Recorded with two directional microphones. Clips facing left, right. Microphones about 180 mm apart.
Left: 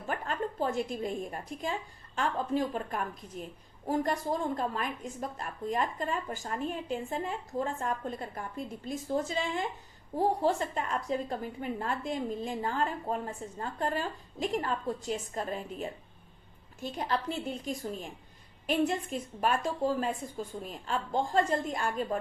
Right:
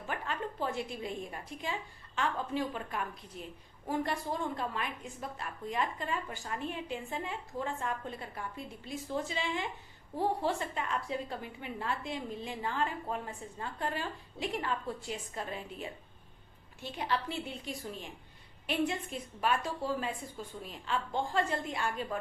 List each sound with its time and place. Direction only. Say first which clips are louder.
0.1 s a woman's voice: left 4 dB; 45° left (ahead or behind)